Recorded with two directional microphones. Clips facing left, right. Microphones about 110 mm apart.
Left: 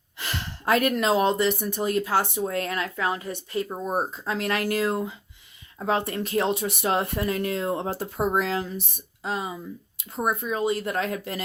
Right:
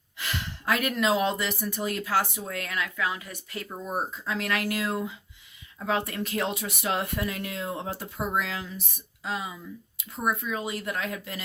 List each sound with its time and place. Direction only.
0.2 s speech: 35° left (ahead or behind)